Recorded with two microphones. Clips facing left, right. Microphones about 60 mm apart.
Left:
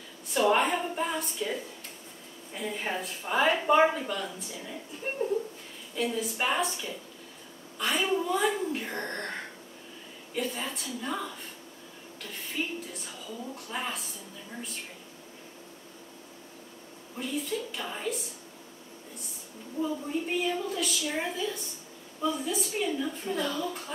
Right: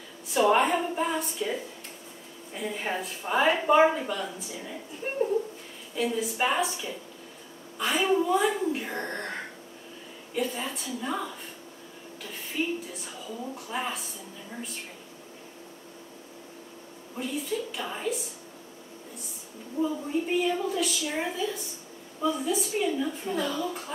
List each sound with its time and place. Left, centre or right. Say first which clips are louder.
0.3 s a woman's voice: right 2 dB; centre
17.2 s a woman's voice: right 1 dB; centre
19.8 s a woman's voice: right 3 dB; centre